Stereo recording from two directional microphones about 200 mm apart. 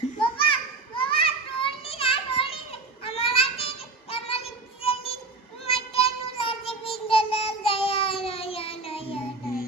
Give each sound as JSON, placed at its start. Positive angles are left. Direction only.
{"t": 0.2, "sound": "children playing", "side_deg": 25}
{"t": 4.1, "sound": "child singing", "side_deg": 30}